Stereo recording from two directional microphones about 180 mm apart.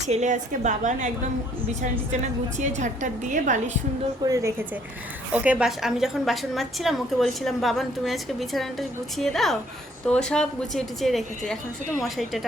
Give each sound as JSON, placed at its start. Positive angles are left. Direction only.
{"t": 0.0, "sound": "a woman's voice", "side_deg": -40}
{"t": 2.6, "sound": "a woman's voice", "side_deg": -40}
{"t": 4.3, "sound": "a woman's voice", "side_deg": -15}